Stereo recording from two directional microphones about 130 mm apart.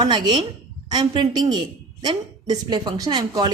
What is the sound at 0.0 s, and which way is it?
A woman's voice, 35° right (ahead or behind).